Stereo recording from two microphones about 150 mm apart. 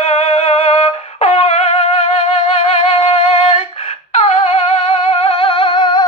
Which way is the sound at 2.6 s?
40° left (ahead or behind).